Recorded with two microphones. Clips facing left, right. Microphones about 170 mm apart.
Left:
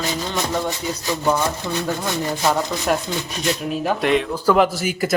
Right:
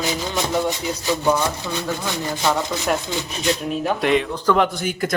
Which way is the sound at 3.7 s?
Centre (ahead or behind).